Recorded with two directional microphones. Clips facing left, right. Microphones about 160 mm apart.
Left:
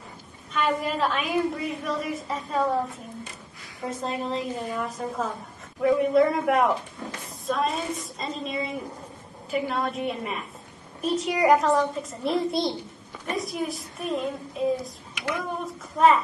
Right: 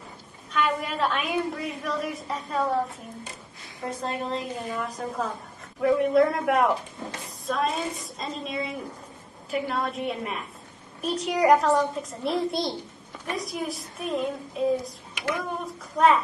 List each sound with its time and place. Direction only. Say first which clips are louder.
0.5 s a woman's voice: left 1 dB; centre (ahead or behind)
3.8 s a woman's voice: left 1 dB; centre (ahead or behind)
7.0 s a sound: even; 20° right (ahead or behind)
7.4 s a woman's voice: left 1 dB; centre (ahead or behind)